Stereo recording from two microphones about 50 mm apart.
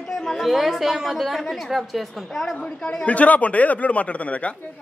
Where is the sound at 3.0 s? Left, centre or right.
Left.